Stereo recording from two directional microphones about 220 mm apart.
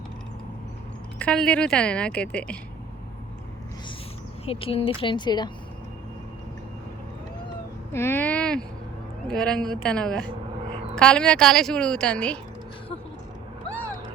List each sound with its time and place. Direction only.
1.2 s a woman's voice: 5° left (ahead or behind)
4.4 s a woman's voice: 25° left (ahead or behind)
7.9 s a woman's voice: 10° left (ahead or behind)